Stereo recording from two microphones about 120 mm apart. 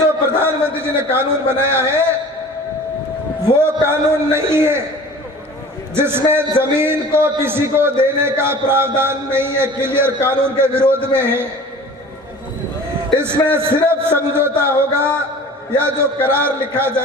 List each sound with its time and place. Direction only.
0.4 s a man's voice: 20° right (ahead or behind)
3.6 s a man's voice: 20° right (ahead or behind)
5.9 s a man's voice: 20° right (ahead or behind)
13.1 s a man's voice: 20° right (ahead or behind)